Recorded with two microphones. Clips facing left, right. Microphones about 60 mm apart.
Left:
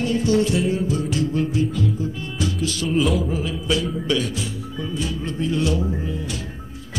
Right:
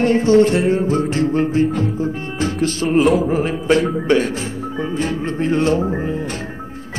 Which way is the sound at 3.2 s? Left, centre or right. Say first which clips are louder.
Right 7 dB; right.